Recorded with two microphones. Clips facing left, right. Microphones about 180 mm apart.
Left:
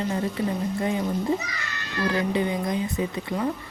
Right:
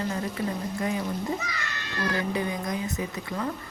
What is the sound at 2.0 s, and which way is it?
Speech, 25° left (ahead or behind).